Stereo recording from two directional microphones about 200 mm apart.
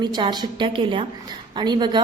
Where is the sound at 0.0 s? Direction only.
20° right (ahead or behind).